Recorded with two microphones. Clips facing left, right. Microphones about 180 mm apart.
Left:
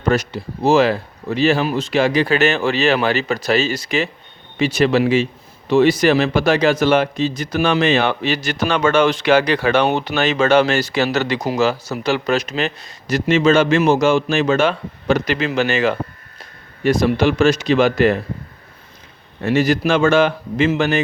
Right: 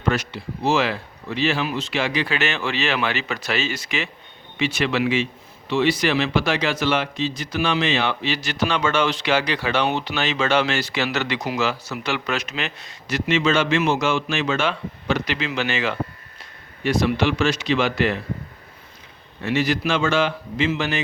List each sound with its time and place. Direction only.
0.0 s a man's voice: 40° left (ahead or behind)
19.4 s a man's voice: 45° left (ahead or behind)